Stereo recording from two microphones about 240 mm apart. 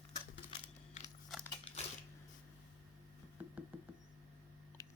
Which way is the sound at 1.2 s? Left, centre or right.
Centre.